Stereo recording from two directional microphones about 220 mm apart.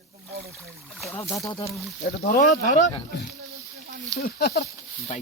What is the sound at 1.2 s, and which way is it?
Speech, 15° left (ahead or behind).